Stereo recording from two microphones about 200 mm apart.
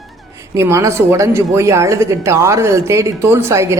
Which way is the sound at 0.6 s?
15° right (ahead or behind).